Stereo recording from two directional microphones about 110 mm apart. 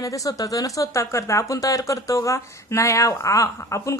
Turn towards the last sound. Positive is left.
turn(degrees=30)  # may be behind; listen again after turning